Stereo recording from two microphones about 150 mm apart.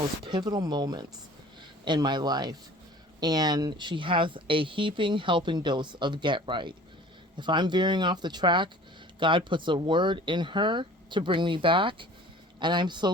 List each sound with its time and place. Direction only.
0.3 s speech: 30° right (ahead or behind)